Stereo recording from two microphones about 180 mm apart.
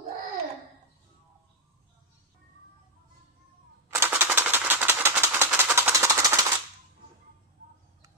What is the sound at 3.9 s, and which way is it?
Typewriter, 10° right (ahead or behind).